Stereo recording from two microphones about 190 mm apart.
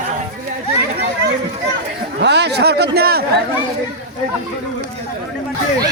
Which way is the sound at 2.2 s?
65° right (ahead or behind).